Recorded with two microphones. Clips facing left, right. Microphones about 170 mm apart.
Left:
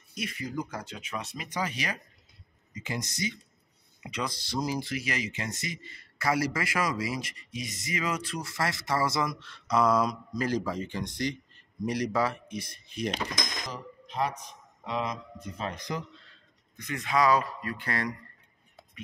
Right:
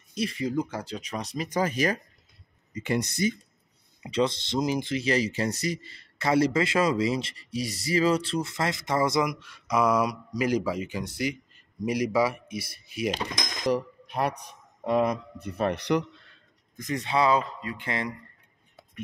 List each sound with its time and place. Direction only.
0.1 s speech: 30° right (ahead or behind)
2.7 s speech: 65° right (ahead or behind)
4.1 s speech: 25° right (ahead or behind); by 13.1 s 10° right (ahead or behind)
13.7 s speech: 70° right (ahead or behind)
16.7 s speech: 35° right (ahead or behind); by 18.1 s 20° right (ahead or behind)